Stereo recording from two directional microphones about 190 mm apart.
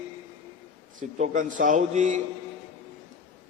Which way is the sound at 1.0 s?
45° right (ahead or behind).